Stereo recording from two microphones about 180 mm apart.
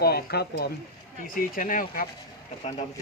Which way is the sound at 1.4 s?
50° left (ahead or behind).